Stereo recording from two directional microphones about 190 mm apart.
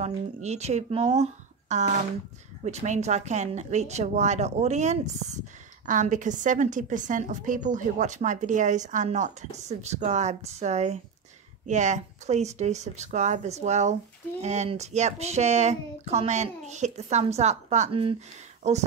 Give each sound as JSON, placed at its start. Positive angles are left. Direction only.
{"t": 0.0, "sound": "a woman's voice", "side_deg": -35}